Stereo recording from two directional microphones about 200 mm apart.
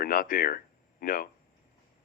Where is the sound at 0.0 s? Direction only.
45° left (ahead or behind).